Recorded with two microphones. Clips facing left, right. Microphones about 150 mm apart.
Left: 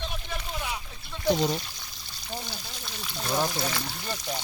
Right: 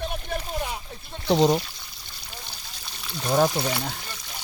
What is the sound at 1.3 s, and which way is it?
Speech, 70° right (ahead or behind).